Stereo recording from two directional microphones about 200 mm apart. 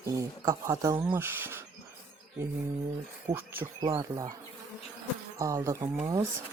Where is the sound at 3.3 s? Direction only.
10° right (ahead or behind).